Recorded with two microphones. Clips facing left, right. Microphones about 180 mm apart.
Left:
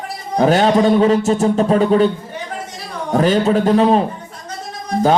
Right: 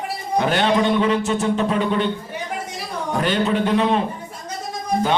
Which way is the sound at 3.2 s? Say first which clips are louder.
Left 6 dB; 40° left (ahead or behind).